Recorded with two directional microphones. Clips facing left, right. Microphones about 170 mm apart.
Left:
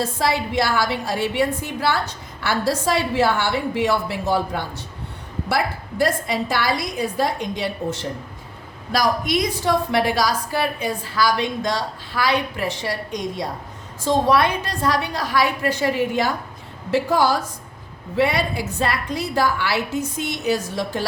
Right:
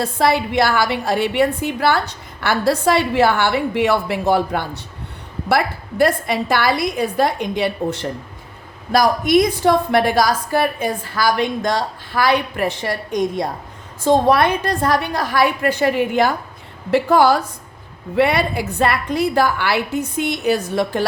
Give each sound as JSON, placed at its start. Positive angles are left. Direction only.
{"t": 0.0, "sound": "a woman's voice", "side_deg": -60}